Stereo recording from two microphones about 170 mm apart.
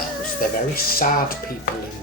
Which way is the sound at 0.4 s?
55° left (ahead or behind).